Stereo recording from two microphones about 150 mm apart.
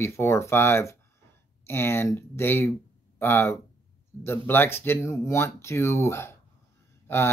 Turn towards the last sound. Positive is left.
turn(degrees=15)  # may be behind; listen again after turning